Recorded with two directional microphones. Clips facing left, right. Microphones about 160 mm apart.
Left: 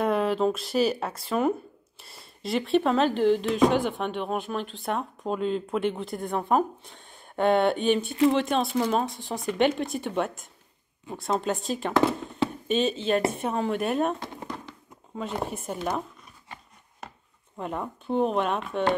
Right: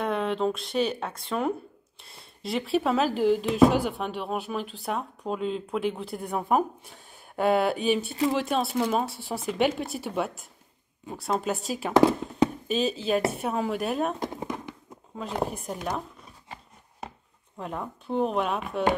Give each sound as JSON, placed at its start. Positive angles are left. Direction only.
{"t": 0.0, "sound": "speech", "side_deg": 5}
{"t": 11.9, "sound": "speech", "side_deg": -15}
{"t": 12.6, "sound": "speech", "side_deg": 0}
{"t": 14.3, "sound": "a sound", "side_deg": -20}
{"t": 15.1, "sound": "speech", "side_deg": 0}
{"t": 17.6, "sound": "speech", "side_deg": 0}